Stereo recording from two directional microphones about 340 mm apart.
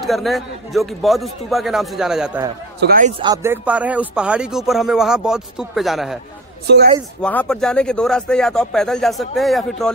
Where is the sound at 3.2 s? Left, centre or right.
Centre.